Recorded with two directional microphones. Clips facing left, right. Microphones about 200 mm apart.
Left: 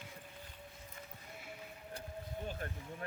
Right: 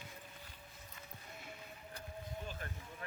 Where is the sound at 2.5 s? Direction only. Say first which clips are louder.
Left 4 dB; 45° left (ahead or behind).